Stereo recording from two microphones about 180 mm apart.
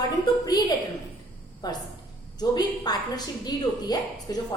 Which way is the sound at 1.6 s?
20° left (ahead or behind).